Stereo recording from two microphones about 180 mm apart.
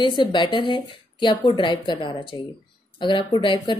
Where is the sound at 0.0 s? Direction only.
25° left (ahead or behind).